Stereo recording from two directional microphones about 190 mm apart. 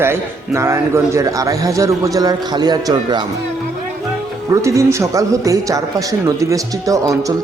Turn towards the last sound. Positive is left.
turn(degrees=-15)  # may be behind; listen again after turning